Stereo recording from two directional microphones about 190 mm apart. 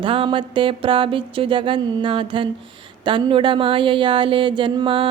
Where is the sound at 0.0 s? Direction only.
25° right (ahead or behind).